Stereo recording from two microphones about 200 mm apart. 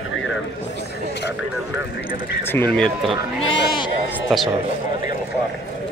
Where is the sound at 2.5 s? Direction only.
5° left (ahead or behind).